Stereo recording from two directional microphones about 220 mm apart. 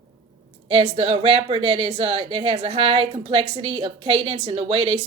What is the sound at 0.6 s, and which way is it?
A woman's voice, 25° right (ahead or behind).